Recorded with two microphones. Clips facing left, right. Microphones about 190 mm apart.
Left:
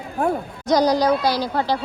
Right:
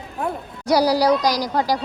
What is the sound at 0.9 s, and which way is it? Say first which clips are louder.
Speech: right 1 dB; 10° right (ahead or behind).